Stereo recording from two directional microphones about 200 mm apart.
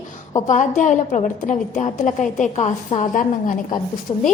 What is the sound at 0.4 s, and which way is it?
A woman's voice, 40° left (ahead or behind).